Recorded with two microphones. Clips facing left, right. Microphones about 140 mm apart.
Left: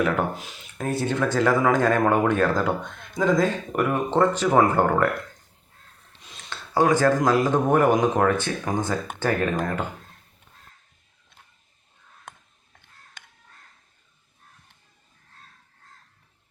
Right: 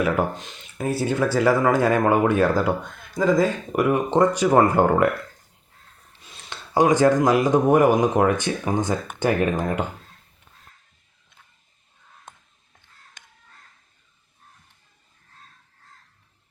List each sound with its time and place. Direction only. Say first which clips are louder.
0.8 s speech: right 2 dB; 5° right (ahead or behind)
6.5 s speech: right 2 dB; 15° right (ahead or behind)